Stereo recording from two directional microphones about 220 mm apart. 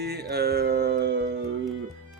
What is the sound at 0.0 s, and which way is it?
Music, 45° right (ahead or behind).